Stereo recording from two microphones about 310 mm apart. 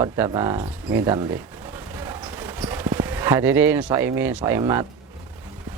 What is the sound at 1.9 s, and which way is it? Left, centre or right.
Clip-clop, centre.